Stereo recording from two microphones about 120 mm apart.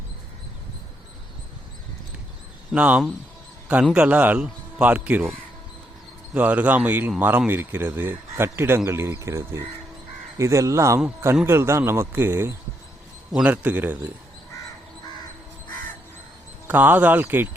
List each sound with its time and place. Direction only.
2.7 s speech: 10° right (ahead or behind)
6.3 s speech: 15° right (ahead or behind)
16.6 s speech: 15° right (ahead or behind)